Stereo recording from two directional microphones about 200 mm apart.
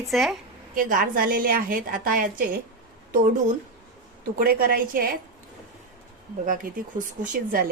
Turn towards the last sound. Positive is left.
turn(degrees=-40)  # may be behind; listen again after turning